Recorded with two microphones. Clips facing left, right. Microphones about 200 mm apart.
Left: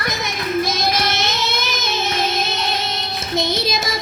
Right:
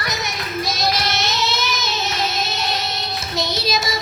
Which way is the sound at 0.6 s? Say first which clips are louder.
Left 2 dB; 50° left (ahead or behind).